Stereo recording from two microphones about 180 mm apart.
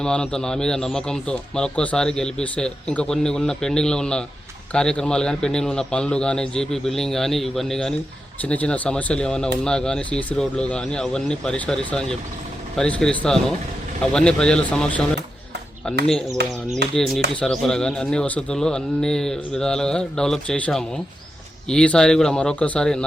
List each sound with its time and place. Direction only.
0.0 s speech: 5° left (ahead or behind)
16.4 s speech: 65° right (ahead or behind)
17.4 s speech: centre (ahead or behind)